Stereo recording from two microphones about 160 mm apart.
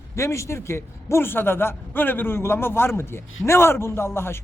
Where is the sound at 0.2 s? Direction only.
20° left (ahead or behind).